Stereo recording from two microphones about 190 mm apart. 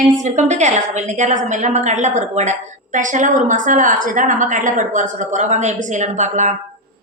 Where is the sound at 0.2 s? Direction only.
40° right (ahead or behind).